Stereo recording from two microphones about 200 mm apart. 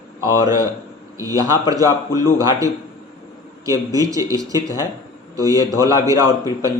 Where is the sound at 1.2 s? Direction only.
15° right (ahead or behind).